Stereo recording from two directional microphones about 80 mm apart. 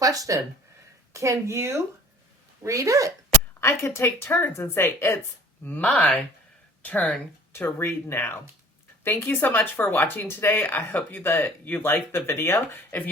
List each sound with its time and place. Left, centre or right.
0.0 s a woman's voice: right
3.6 s speech: left
5.6 s speech: left
7.5 s speech: left